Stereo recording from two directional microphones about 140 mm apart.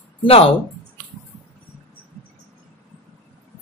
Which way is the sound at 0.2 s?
45° left (ahead or behind).